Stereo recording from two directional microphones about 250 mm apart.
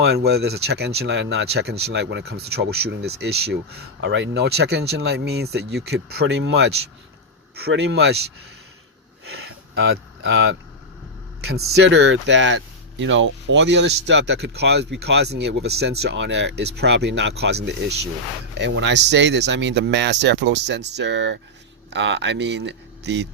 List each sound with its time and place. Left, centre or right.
0.0 s speech: right
9.2 s gasp: right
11.3 s speech: right